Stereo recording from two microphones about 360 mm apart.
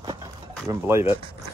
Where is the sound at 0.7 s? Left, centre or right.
Centre.